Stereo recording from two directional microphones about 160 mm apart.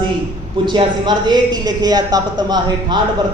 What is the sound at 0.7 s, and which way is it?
A woman's voice, 25° right (ahead or behind).